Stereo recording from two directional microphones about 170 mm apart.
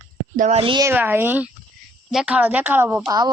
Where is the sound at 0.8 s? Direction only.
10° right (ahead or behind).